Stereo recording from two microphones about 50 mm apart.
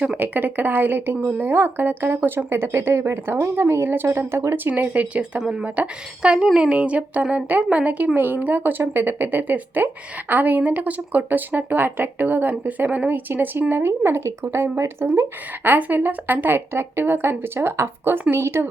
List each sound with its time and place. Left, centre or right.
0.2 s speech: right
2.5 s speech: right
4.5 s speech: right
6.3 s speech: centre; by 14.8 s right
15.6 s speech: right